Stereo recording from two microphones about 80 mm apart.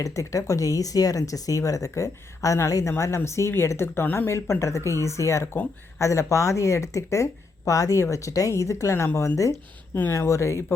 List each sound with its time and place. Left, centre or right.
0.0 s speech: left